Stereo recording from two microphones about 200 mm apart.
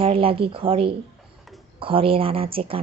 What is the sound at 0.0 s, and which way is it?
Speech, 30° right (ahead or behind).